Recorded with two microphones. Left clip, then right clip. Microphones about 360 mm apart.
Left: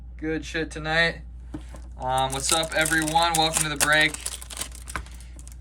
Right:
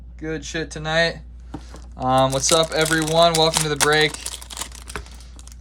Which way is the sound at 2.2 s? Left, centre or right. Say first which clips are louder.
Right 8 dB; centre.